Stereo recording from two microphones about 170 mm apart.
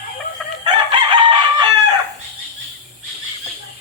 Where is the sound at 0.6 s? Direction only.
30° right (ahead or behind).